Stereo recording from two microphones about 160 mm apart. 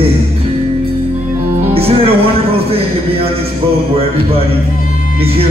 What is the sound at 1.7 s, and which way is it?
Music, 35° right (ahead or behind).